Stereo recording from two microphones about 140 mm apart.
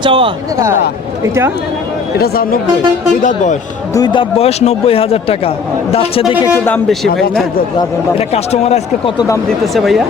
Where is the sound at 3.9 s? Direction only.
30° left (ahead or behind).